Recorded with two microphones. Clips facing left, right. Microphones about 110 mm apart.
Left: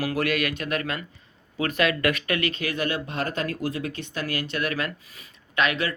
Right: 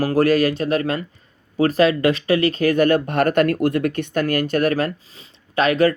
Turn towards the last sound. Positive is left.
turn(degrees=-40)  # may be behind; listen again after turning